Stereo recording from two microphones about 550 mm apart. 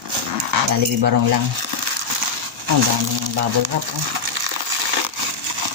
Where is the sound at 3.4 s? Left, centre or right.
Right.